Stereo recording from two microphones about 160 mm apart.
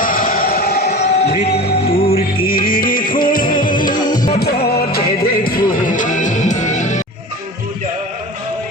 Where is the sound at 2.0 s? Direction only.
40° left (ahead or behind).